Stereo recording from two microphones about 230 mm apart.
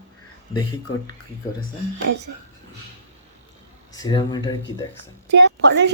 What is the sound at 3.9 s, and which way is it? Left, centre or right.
Speech, centre.